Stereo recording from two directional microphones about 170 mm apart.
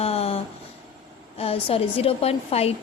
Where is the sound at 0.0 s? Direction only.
35° left (ahead or behind).